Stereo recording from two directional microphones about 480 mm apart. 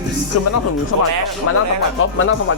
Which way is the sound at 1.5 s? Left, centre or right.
Left.